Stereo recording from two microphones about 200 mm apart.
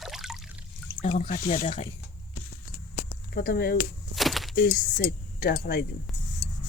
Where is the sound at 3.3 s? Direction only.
50° left (ahead or behind).